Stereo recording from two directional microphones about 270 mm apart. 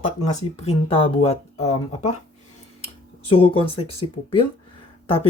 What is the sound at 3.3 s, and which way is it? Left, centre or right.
Speech, left.